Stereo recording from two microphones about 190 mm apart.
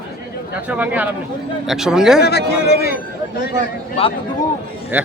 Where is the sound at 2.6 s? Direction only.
55° left (ahead or behind).